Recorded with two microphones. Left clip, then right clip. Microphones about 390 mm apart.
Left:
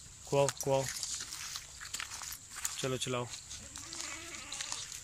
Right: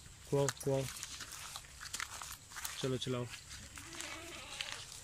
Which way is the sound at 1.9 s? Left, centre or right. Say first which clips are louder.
Even; centre.